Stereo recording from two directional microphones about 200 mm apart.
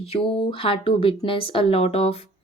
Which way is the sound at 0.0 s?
30° left (ahead or behind).